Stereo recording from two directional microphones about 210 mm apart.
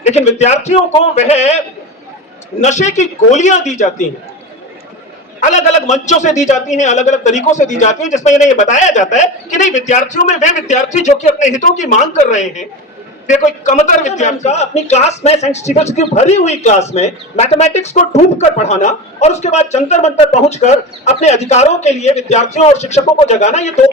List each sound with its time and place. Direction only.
0.0 s a man's voice: 30° left (ahead or behind)
5.4 s a man's voice: 35° left (ahead or behind)